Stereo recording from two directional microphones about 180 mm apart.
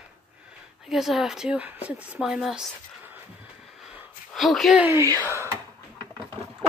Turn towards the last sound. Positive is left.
turn(degrees=-15)  # may be behind; listen again after turning